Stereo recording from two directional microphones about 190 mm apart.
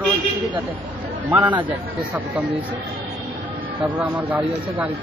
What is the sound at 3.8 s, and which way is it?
Speech, 10° right (ahead or behind).